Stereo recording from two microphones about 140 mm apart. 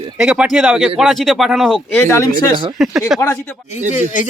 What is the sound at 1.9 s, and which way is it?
Speech, 15° left (ahead or behind).